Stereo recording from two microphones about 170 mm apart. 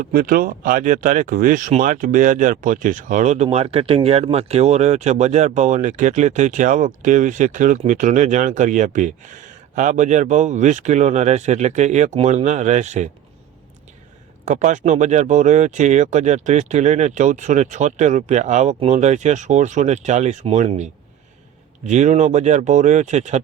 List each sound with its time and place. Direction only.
0.0 s speech: 55° right (ahead or behind)
14.4 s speech: 45° right (ahead or behind)
21.8 s speech: 45° right (ahead or behind)